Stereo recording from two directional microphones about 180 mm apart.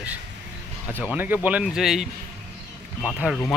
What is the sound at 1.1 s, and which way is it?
Speech, 10° right (ahead or behind).